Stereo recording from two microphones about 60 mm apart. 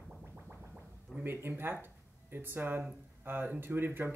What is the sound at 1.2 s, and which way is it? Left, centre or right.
Speech, right.